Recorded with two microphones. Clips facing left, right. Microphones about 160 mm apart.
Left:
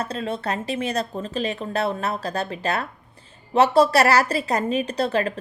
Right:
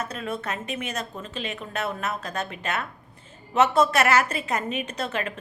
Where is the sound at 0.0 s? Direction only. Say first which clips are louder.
Left 4 dB; 30° left (ahead or behind).